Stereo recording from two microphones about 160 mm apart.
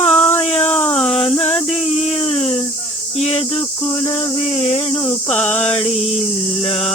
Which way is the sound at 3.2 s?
40° left (ahead or behind).